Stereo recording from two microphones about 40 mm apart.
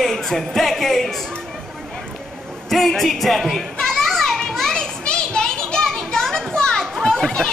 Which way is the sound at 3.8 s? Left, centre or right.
Centre.